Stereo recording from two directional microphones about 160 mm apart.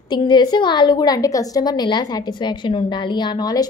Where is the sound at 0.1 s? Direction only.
25° left (ahead or behind).